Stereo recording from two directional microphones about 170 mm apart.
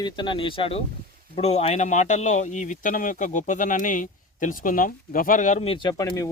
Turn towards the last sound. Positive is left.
turn(degrees=20)  # may be behind; listen again after turning